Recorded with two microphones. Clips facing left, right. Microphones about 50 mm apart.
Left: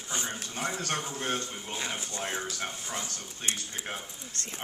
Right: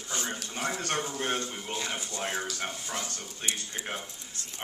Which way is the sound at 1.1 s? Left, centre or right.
Right.